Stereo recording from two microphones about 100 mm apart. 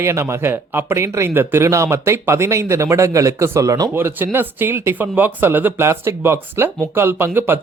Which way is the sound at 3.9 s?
20° right (ahead or behind).